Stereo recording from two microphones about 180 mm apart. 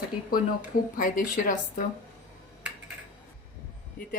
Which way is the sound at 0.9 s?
50° left (ahead or behind).